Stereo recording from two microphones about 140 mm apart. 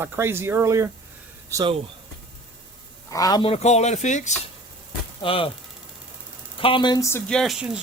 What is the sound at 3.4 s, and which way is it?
Speech, 50° left (ahead or behind).